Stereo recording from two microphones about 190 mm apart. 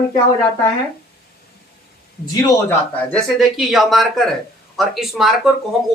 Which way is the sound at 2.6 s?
5° left (ahead or behind).